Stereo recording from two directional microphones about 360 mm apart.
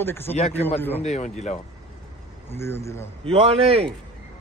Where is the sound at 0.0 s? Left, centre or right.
Centre.